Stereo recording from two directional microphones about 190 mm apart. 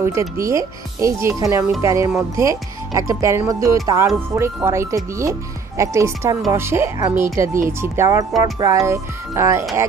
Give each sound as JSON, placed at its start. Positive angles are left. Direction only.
{"t": 0.0, "sound": "speech", "side_deg": -15}